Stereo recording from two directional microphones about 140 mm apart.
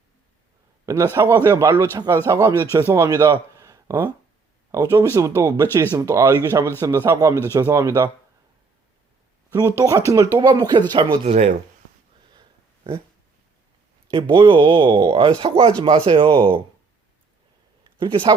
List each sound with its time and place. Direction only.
0.9 s speech: 25° right (ahead or behind)
9.5 s speech: 20° right (ahead or behind); by 11.5 s 50° right (ahead or behind)
14.1 s speech: 35° right (ahead or behind)
17.9 s speech: 35° right (ahead or behind)